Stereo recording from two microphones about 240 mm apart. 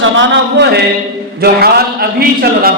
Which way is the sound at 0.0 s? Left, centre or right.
Right.